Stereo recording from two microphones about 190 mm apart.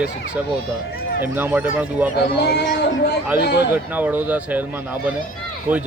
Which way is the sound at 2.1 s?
60° left (ahead or behind).